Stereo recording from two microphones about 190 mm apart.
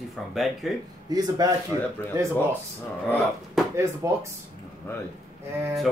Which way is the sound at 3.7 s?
15° right (ahead or behind).